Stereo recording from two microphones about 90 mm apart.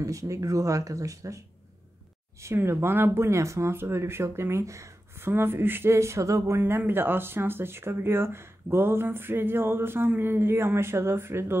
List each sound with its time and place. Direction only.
0.0 s speech: 35° right (ahead or behind)
2.4 s speech: 30° right (ahead or behind)